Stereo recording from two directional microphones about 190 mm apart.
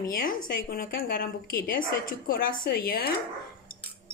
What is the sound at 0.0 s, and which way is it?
A woman's voice, 45° left (ahead or behind).